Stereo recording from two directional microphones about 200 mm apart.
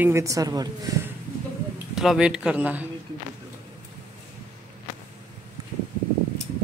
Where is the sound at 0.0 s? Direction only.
15° right (ahead or behind).